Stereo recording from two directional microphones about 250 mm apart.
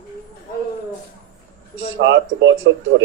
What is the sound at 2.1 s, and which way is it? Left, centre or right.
Speech, right.